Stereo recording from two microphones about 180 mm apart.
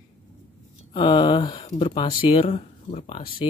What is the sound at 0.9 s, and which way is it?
Speech, 25° left (ahead or behind).